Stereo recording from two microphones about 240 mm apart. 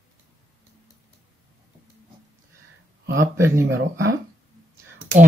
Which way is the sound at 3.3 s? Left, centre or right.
Centre.